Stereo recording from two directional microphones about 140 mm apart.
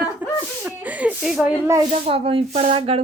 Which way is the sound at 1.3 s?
5° right (ahead or behind).